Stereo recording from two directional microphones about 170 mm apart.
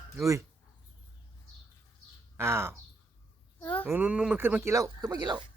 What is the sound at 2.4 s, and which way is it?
Speech, 15° right (ahead or behind).